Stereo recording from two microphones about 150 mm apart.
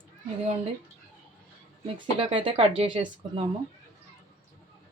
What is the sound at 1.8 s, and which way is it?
Speech, 35° right (ahead or behind).